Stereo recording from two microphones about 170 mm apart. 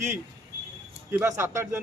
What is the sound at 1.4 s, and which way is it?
Speech, 15° right (ahead or behind).